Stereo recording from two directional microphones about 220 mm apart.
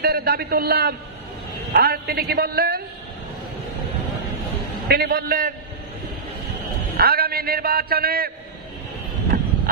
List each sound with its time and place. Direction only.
0.0 s a man's voice: 45° right (ahead or behind)
4.8 s a man's voice: 45° right (ahead or behind)
7.0 s a sound: 45° right (ahead or behind)
9.3 s vehicle: 45° right (ahead or behind)